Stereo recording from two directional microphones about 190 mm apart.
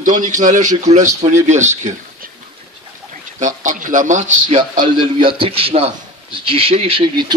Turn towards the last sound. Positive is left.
turn(degrees=-25)  # may be behind; listen again after turning